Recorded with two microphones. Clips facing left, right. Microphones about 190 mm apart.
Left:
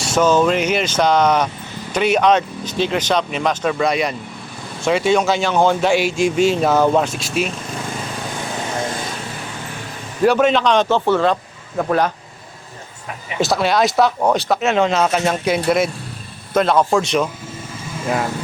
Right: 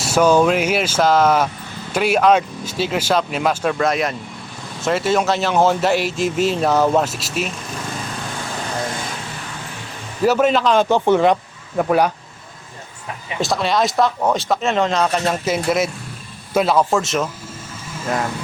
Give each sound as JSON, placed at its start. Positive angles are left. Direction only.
{"t": 0.0, "sound": "speech", "side_deg": -10}
{"t": 10.2, "sound": "speech", "side_deg": -5}
{"t": 10.8, "sound": "speech", "side_deg": -15}
{"t": 13.4, "sound": "speech", "side_deg": 0}